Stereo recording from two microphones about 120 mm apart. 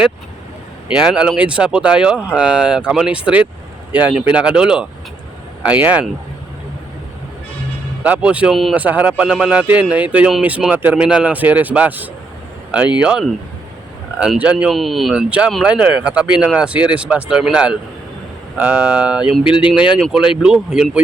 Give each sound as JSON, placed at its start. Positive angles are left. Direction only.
{"t": 0.9, "sound": "speech", "side_deg": -10}
{"t": 8.0, "sound": "speech", "side_deg": -10}
{"t": 19.5, "sound": "speech", "side_deg": 45}
{"t": 19.9, "sound": "speech", "side_deg": -5}